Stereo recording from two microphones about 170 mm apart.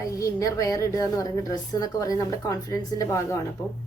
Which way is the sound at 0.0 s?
20° left (ahead or behind).